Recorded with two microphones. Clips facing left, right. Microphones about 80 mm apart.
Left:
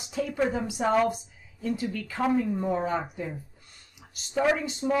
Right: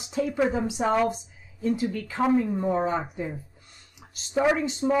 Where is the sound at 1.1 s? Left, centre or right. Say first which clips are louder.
Even; right.